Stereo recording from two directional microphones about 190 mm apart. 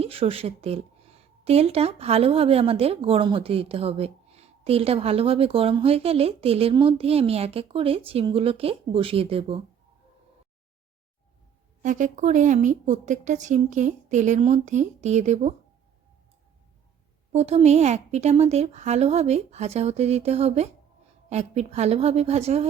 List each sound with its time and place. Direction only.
0.0 s a woman's voice: 30° right (ahead or behind)
11.8 s a woman's voice: 40° right (ahead or behind)
17.3 s a woman's voice: 35° right (ahead or behind)